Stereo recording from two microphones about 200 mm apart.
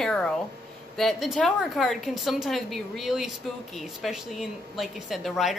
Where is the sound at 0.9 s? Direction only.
Centre (ahead or behind).